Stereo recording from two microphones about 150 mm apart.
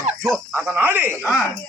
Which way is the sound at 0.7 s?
10° right (ahead or behind).